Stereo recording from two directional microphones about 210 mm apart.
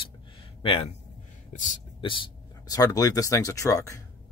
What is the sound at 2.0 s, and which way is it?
Speech, 25° left (ahead or behind).